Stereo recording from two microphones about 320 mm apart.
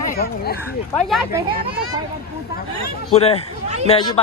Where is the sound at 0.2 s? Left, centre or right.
Left.